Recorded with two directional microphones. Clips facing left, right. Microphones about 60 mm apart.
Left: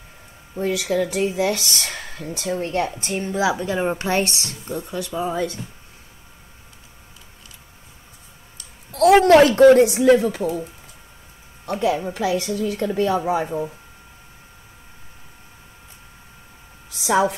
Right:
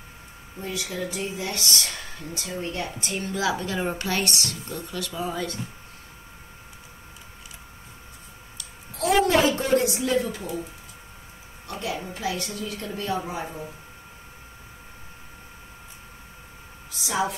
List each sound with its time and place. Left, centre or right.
0.6 s speech: left
2.5 s a woman's voice: left
3.1 s a woman's voice: left
8.9 s a woman's voice: left
11.9 s a woman's voice: left
17.0 s a woman's voice: left